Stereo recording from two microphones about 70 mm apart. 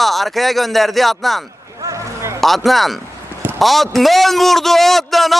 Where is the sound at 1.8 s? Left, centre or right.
Right.